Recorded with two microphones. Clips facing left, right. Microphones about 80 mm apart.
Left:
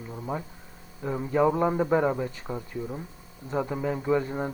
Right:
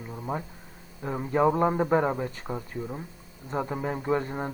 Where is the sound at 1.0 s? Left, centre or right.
Centre.